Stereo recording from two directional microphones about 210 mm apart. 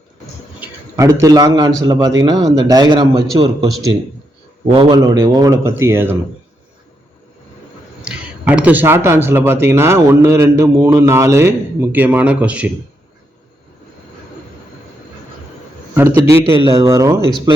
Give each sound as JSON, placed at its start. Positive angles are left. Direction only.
{"t": 0.6, "sound": "a man's voice", "side_deg": -15}
{"t": 4.7, "sound": "speech", "side_deg": -20}
{"t": 8.0, "sound": "speech", "side_deg": -5}
{"t": 16.0, "sound": "speech", "side_deg": -10}